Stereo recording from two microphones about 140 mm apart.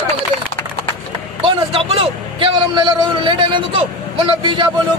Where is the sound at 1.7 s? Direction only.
40° right (ahead or behind).